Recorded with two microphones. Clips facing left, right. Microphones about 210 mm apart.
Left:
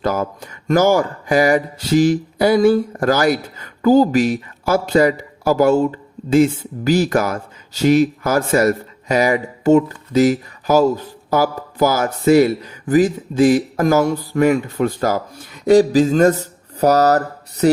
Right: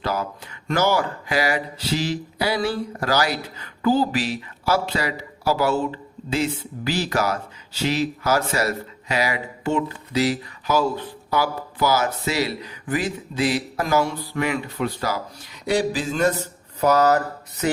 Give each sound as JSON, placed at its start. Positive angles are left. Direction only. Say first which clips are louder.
{"t": 0.0, "sound": "speech", "louder": "left 6 dB", "side_deg": 45}